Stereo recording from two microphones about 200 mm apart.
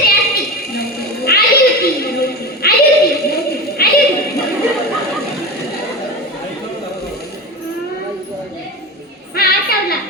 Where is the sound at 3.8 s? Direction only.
50° left (ahead or behind).